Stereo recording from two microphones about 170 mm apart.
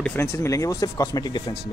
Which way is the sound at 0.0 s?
10° left (ahead or behind).